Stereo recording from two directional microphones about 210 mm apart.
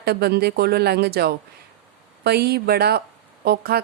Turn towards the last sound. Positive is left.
turn(degrees=-50)  # may be behind; listen again after turning